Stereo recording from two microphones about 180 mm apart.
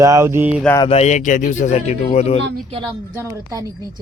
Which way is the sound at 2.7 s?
25° right (ahead or behind).